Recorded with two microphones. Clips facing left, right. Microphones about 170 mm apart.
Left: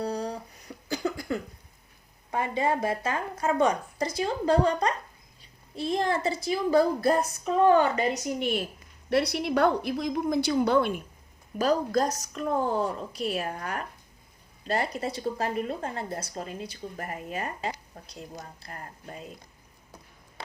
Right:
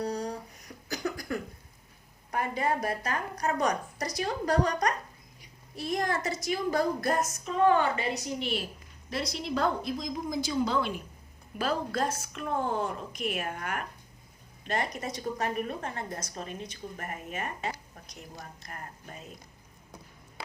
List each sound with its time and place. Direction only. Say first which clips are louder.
0.0 s a sound: left 2 dB; 30° left (ahead or behind)
0.9 s cough: left 3 dB; 25° left (ahead or behind)
2.3 s a woman's voice: left 3 dB; 25° left (ahead or behind); by 8.6 s 50° left (ahead or behind)
9.0 s speech: left 8 dB; 65° left (ahead or behind)
11.5 s a woman's voice: left 6 dB; 40° left (ahead or behind)